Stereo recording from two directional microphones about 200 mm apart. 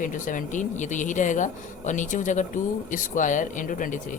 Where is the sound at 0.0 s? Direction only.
40° left (ahead or behind).